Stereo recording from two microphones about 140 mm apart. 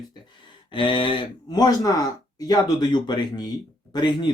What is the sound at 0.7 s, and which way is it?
Speech, 35° left (ahead or behind).